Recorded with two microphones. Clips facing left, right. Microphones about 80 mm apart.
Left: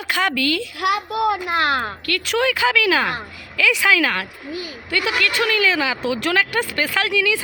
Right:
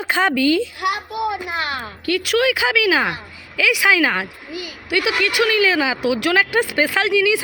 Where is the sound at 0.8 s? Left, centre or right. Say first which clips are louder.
Left 2 dB; left.